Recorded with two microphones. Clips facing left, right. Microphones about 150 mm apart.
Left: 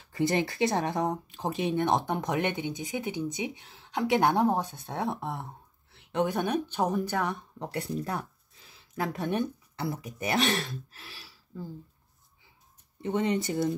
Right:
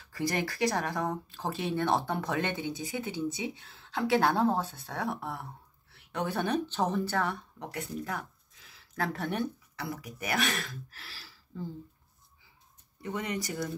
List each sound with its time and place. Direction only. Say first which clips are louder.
0.1 s speech: left 5 dB; 20° left (ahead or behind)
7.5 s speech: left 4 dB; 35° left (ahead or behind)
8.7 s speech: left 1 dB; 15° left (ahead or behind)
13.0 s speech: left 7 dB; 25° left (ahead or behind)